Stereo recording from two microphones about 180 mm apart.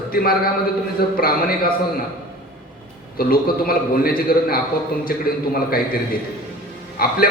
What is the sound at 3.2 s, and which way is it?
A man's voice, 55° left (ahead or behind).